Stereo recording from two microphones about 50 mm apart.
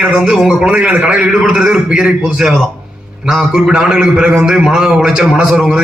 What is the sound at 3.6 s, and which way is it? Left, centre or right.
A man's voice, centre.